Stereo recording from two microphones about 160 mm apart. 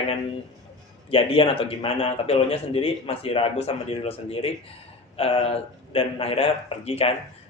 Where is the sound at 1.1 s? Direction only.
35° left (ahead or behind).